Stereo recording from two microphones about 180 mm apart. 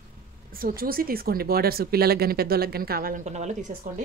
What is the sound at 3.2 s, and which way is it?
Speech, 40° right (ahead or behind).